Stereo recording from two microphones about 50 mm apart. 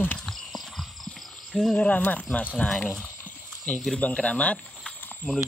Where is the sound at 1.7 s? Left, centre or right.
Left.